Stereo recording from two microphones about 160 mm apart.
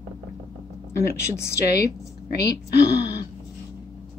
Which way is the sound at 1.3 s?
15° left (ahead or behind).